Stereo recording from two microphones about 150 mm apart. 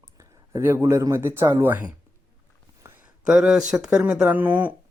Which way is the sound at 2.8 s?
15° right (ahead or behind).